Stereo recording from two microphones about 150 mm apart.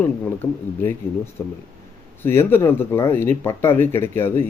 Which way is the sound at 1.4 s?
15° left (ahead or behind).